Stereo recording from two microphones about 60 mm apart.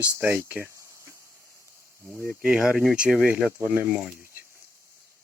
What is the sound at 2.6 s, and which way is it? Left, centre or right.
Speech, centre.